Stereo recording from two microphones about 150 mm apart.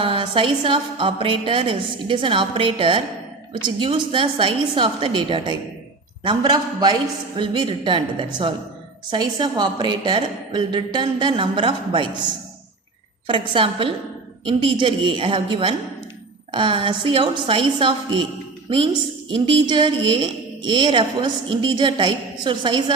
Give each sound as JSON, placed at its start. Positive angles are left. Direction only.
{"t": 0.0, "sound": "a woman's voice", "side_deg": -35}
{"t": 13.2, "sound": "a woman's voice", "side_deg": -35}
{"t": 19.3, "sound": "a woman's voice", "side_deg": -30}